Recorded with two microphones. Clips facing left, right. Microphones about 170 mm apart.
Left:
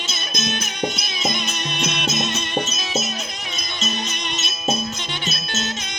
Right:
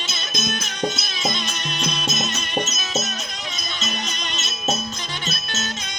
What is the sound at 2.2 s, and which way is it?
Music, 25° left (ahead or behind).